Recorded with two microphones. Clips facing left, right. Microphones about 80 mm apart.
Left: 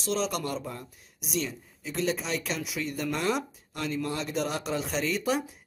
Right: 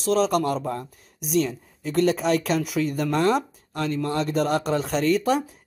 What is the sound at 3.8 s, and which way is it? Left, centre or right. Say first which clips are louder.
Speech: right 6 dB; right.